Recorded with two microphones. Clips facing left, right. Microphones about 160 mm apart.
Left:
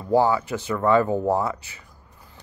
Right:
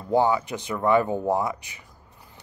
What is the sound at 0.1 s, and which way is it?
Speech, 20° right (ahead or behind).